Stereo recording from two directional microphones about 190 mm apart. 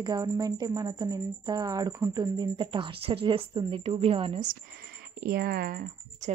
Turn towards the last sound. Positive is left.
turn(degrees=-50)  # may be behind; listen again after turning